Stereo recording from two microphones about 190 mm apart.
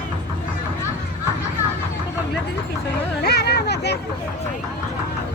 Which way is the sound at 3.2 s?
60° left (ahead or behind).